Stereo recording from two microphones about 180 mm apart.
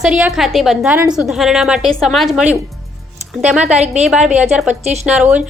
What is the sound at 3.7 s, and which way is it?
Speech, 35° right (ahead or behind).